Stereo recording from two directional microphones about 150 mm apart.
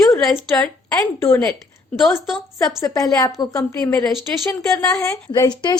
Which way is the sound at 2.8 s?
20° left (ahead or behind).